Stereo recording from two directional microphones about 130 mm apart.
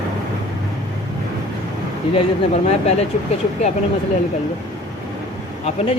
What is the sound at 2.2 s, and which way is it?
Speech, 55° left (ahead or behind).